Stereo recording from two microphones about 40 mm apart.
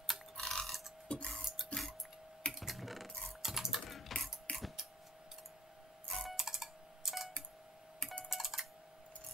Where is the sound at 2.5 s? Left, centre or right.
Centre.